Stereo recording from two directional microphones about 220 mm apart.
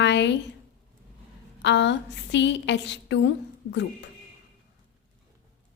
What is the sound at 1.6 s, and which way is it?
Speech, 55° left (ahead or behind).